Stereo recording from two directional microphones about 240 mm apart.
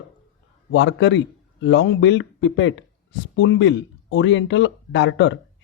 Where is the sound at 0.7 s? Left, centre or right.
Left.